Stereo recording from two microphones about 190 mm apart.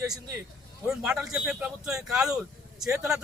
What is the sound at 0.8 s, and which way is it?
A man's voice, 5° right (ahead or behind).